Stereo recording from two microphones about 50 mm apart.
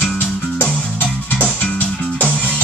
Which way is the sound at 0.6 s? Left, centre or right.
Left.